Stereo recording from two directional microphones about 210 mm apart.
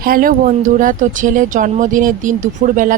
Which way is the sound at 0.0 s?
45° right (ahead or behind).